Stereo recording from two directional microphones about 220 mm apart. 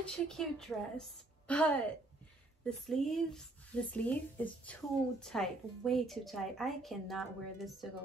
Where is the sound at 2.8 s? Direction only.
Centre (ahead or behind).